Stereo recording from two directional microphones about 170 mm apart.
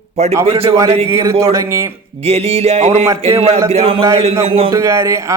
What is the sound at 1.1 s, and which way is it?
Speech, 15° right (ahead or behind).